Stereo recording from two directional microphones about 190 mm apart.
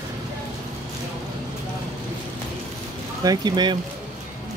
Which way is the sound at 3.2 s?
20° right (ahead or behind).